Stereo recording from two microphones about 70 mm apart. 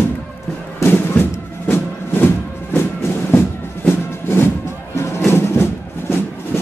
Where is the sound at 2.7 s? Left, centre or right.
Left.